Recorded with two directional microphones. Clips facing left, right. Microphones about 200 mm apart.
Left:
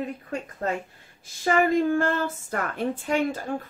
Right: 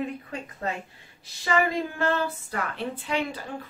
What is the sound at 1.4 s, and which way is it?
A woman's voice, 50° left (ahead or behind).